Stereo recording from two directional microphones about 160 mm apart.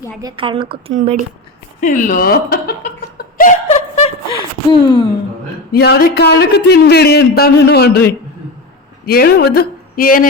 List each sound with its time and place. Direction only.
0.2 s a woman's voice: 30° right (ahead or behind)
1.8 s speech: 55° left (ahead or behind); by 2.7 s 70° left (ahead or behind)
3.2 s chuckle: 55° left (ahead or behind)
3.7 s a sound: 40° left (ahead or behind)
5.7 s speech: 85° left
9.0 s speech: 75° left (ahead or behind)